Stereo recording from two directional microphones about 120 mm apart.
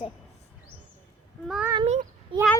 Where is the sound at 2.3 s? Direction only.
45° right (ahead or behind).